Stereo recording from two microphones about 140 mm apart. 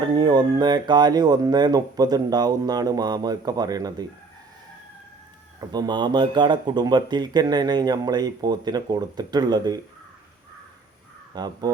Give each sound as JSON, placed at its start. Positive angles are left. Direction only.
{"t": 0.0, "sound": "speech", "side_deg": -30}
{"t": 5.5, "sound": "speech", "side_deg": -30}
{"t": 11.3, "sound": "speech", "side_deg": -30}